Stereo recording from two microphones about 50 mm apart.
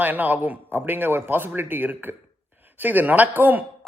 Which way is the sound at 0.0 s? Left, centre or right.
Right.